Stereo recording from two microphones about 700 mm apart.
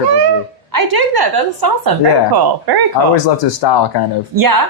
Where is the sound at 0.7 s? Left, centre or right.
Right.